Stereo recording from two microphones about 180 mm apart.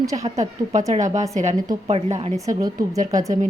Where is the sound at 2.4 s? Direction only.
20° right (ahead or behind).